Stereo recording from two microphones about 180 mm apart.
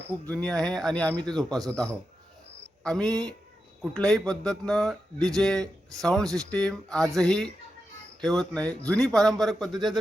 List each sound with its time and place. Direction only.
0.3 s a man's voice: 5° left (ahead or behind)
1.5 s a man's voice: 20° right (ahead or behind)
2.8 s a man's voice: 5° left (ahead or behind)